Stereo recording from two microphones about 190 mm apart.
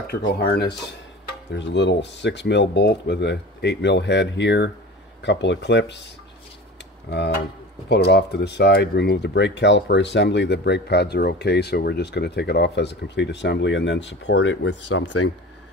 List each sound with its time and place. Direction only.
0.5 s speech: 60° left (ahead or behind)
7.9 s speech: 60° left (ahead or behind)